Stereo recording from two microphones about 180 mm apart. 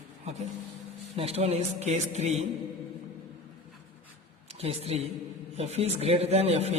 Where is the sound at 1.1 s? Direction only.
35° right (ahead or behind).